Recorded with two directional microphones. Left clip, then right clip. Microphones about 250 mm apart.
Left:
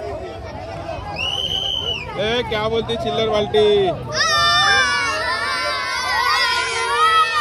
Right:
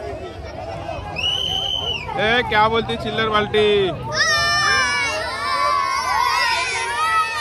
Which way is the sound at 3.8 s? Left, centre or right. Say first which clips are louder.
Even; centre.